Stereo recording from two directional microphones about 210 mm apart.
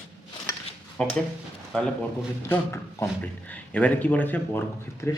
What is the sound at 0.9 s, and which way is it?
Speech, 5° left (ahead or behind).